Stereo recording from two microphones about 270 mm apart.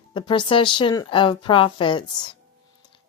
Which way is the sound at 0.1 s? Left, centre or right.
Centre.